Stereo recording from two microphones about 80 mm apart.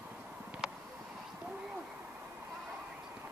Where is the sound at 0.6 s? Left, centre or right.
Centre.